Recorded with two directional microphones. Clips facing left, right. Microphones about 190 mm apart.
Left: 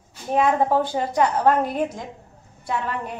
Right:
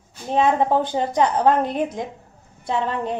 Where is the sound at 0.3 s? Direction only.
25° right (ahead or behind).